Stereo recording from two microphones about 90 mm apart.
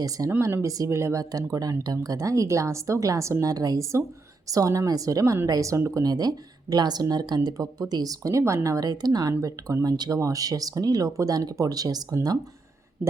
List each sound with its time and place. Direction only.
0.3 s speech: 30° right (ahead or behind); by 12.4 s 45° right (ahead or behind)